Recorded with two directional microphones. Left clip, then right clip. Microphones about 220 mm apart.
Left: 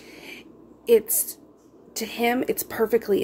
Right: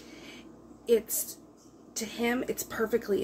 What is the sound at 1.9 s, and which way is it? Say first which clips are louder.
Speech: left 7 dB; 40° left (ahead or behind).